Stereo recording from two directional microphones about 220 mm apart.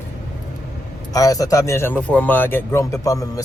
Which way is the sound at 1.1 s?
15° left (ahead or behind).